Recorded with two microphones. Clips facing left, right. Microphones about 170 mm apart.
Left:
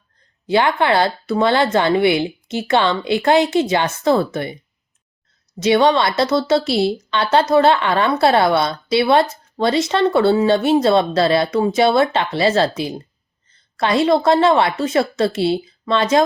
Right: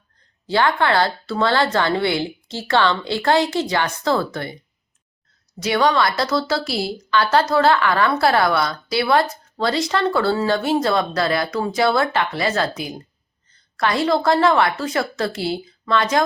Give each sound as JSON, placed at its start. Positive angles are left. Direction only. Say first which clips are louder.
{"t": 0.4, "sound": "speech", "louder": "left 2 dB", "side_deg": 20}
{"t": 5.5, "sound": "speech", "louder": "left 4 dB", "side_deg": 25}